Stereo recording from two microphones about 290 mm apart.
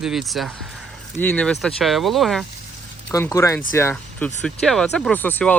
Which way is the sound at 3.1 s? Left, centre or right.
Centre.